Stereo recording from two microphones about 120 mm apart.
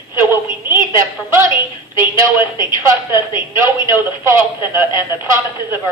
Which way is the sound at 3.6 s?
20° right (ahead or behind).